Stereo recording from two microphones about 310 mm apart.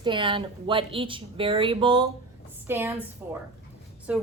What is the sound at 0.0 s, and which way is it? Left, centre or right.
A woman's voice, centre.